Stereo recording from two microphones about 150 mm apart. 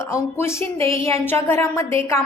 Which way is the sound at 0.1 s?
20° left (ahead or behind).